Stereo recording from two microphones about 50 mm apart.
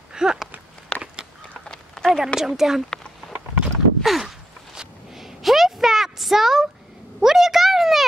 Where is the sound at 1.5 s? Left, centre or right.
Centre.